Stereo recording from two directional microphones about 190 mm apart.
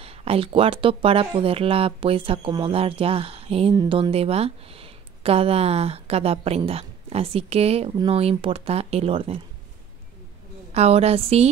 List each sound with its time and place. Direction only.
0.0 s speech: 30° right (ahead or behind)
10.7 s speech: 35° right (ahead or behind)